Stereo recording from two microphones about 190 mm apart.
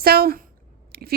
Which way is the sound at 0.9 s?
55° right (ahead or behind).